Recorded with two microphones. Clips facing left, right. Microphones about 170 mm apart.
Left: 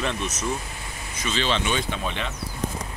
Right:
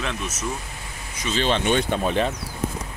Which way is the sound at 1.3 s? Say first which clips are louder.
Right 4 dB; 50° right (ahead or behind).